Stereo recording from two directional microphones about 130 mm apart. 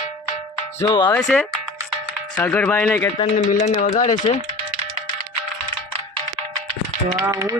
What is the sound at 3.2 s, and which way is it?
Speech, 50° left (ahead or behind).